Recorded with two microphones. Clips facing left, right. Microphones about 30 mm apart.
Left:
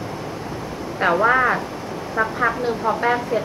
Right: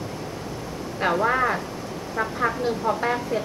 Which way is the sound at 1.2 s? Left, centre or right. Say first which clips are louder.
Left 5 dB; left.